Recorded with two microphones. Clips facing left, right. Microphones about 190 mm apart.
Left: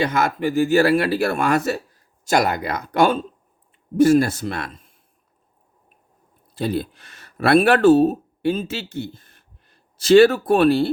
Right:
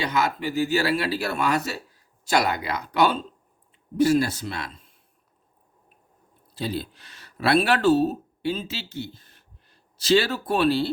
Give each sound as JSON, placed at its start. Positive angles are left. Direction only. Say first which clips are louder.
{"t": 0.0, "sound": "speech", "louder": "left 5 dB", "side_deg": 50}
{"t": 6.5, "sound": "speech", "louder": "left 6 dB", "side_deg": 50}